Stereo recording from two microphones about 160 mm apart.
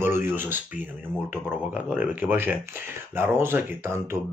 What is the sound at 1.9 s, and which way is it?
Speech, 10° right (ahead or behind).